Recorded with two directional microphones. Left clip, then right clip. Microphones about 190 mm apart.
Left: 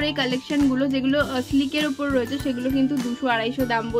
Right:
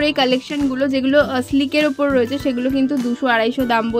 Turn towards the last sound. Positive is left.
turn(degrees=-30)  # may be behind; listen again after turning